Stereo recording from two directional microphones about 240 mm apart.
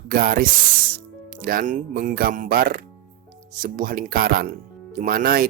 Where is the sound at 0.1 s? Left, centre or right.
Right.